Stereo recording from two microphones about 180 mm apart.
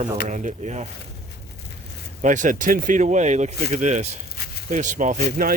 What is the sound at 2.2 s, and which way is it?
Speech, 45° right (ahead or behind).